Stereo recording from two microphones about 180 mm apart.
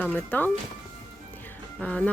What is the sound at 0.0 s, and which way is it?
Speech, 10° left (ahead or behind).